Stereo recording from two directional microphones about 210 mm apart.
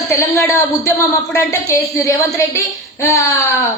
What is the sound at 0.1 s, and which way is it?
A man's voice, 15° left (ahead or behind).